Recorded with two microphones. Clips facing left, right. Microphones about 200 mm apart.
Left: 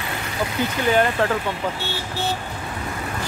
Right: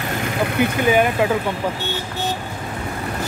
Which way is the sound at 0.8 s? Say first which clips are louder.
Right 1 dB; 10° right (ahead or behind).